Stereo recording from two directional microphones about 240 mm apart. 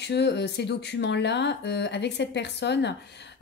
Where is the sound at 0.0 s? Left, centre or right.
Left.